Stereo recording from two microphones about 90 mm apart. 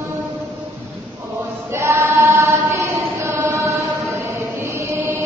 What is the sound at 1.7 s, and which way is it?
Choir, 30° right (ahead or behind).